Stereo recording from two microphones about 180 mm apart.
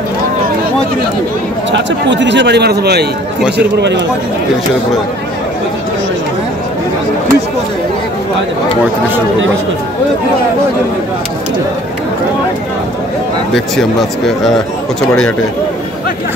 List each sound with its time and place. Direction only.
1.7 s a man's voice: 80° right
15.0 s speech: 5° left (ahead or behind)